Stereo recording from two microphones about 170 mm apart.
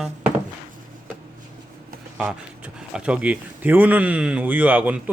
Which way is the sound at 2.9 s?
5° right (ahead or behind).